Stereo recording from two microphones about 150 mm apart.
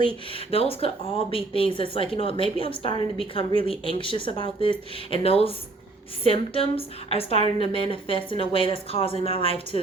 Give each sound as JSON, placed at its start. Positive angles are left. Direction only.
{"t": 0.3, "sound": "a woman's voice", "side_deg": 40}